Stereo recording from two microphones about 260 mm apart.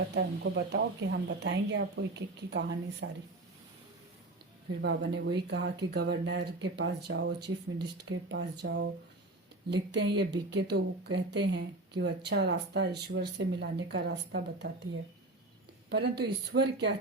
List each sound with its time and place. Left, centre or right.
0.0 s speech: right
4.8 s speech: right
15.9 s speech: right